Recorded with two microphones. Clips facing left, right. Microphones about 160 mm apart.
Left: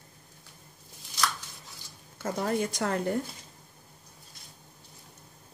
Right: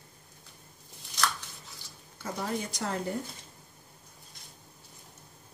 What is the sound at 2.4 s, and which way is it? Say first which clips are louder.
Speech: left 5 dB; 55° left (ahead or behind).